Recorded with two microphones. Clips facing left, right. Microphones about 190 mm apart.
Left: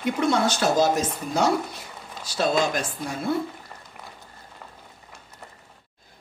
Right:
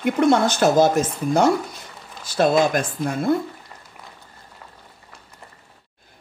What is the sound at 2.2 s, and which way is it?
Speech, 50° right (ahead or behind).